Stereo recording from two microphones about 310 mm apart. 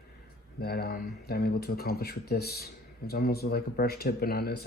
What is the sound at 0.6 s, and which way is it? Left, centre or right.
Speech, left.